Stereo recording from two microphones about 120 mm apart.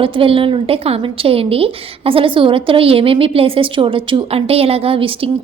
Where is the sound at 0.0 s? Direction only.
50° right (ahead or behind).